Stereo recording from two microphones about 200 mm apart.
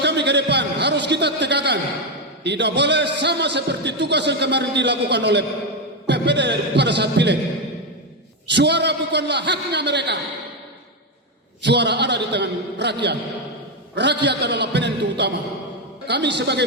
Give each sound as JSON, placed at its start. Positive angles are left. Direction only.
{"t": 0.0, "sound": "a sound", "side_deg": -60}
{"t": 2.4, "sound": "a man's voice", "side_deg": -60}
{"t": 8.4, "sound": "a man's voice", "side_deg": -60}
{"t": 11.6, "sound": "a man's voice", "side_deg": -60}